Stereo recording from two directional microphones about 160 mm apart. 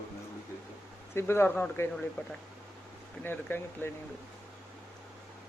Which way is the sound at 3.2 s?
15° left (ahead or behind).